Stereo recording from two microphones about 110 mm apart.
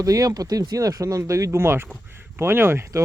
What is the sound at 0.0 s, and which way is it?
Speech, 30° right (ahead or behind).